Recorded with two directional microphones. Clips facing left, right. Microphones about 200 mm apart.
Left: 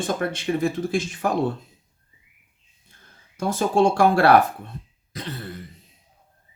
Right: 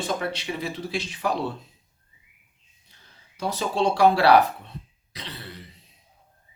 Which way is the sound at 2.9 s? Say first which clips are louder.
Left 2 dB; 50° left (ahead or behind).